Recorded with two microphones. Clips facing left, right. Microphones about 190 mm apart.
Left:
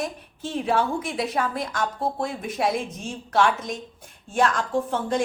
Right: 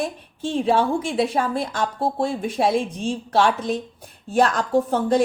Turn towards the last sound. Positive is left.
turn(degrees=-35)  # may be behind; listen again after turning